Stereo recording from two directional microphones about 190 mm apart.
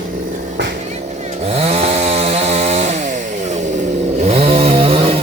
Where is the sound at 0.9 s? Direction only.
35° right (ahead or behind).